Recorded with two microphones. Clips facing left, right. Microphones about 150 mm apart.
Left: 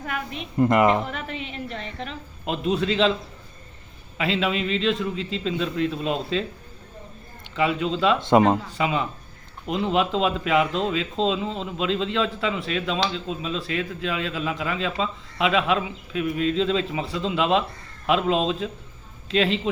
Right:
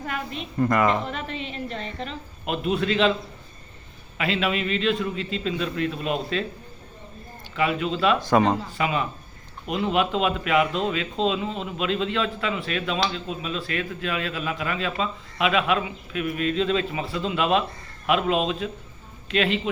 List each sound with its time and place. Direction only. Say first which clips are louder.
0.0 s a woman's voice: even; 10° left (ahead or behind)
2.5 s speech: left 1 dB; 25° left (ahead or behind)
4.2 s speech: left 1 dB; 25° left (ahead or behind)
7.5 s speech: left 1 dB; 25° left (ahead or behind)